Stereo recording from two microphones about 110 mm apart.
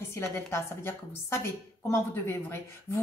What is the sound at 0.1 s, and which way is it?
A woman's voice, 25° left (ahead or behind).